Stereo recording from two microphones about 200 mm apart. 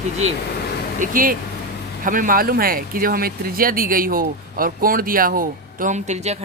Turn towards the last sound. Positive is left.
turn(degrees=-35)  # may be behind; listen again after turning